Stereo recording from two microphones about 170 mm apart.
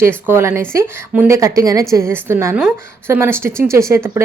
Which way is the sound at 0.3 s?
15° right (ahead or behind).